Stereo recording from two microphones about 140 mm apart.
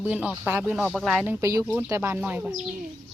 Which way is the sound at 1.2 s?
20° right (ahead or behind).